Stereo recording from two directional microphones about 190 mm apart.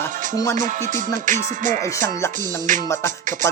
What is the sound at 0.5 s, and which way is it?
Music, 40° right (ahead or behind).